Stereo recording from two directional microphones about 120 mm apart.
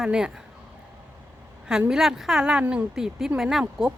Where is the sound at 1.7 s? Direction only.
5° right (ahead or behind).